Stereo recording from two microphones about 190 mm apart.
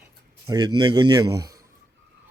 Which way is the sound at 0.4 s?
20° right (ahead or behind).